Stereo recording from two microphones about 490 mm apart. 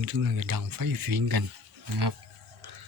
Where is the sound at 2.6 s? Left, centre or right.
Right.